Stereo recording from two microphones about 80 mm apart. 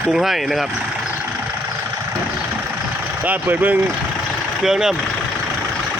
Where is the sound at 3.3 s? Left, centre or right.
Right.